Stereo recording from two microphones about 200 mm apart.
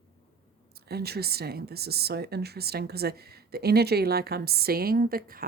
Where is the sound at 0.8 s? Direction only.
50° right (ahead or behind).